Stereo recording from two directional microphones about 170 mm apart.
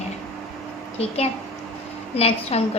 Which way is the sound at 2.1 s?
35° left (ahead or behind).